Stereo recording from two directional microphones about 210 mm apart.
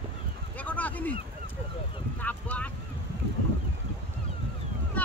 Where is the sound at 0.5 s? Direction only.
5° left (ahead or behind).